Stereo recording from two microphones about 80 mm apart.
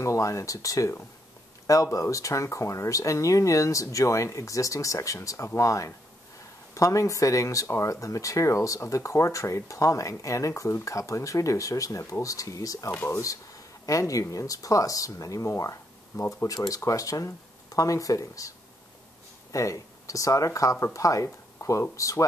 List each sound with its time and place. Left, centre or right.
0.0 s speech: left
12.9 s speech: left
13.8 s speech: left
19.5 s speech: left
21.6 s a sound: left
21.9 s speech: left